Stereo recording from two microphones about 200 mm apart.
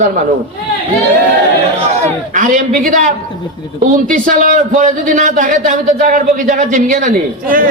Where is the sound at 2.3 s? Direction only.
40° right (ahead or behind).